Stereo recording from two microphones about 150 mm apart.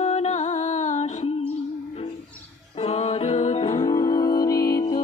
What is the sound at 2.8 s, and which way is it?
Music, 45° left (ahead or behind).